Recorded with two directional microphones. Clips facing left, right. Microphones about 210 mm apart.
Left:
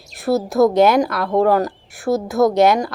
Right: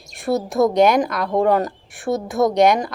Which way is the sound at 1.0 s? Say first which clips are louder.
Left 2 dB; 15° right (ahead or behind).